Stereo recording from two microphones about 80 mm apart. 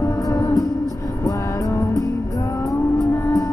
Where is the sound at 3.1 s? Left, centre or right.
Left.